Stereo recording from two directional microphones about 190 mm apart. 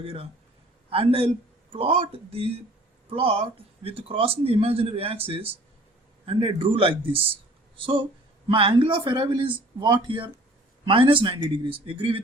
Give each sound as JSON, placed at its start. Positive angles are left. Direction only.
{"t": 0.0, "sound": "a man's voice", "side_deg": -30}